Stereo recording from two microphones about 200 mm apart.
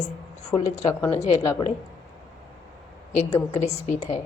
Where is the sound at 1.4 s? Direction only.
15° left (ahead or behind).